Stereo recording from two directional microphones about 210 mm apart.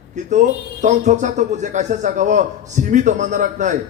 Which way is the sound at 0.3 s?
35° right (ahead or behind).